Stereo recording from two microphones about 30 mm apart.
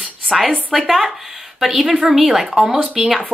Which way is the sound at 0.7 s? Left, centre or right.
Centre.